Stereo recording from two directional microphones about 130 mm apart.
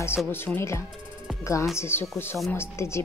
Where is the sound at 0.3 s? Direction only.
15° left (ahead or behind).